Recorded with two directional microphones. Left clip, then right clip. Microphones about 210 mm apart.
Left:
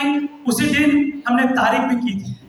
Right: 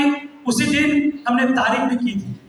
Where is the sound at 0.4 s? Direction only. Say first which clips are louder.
Even; 55° left (ahead or behind).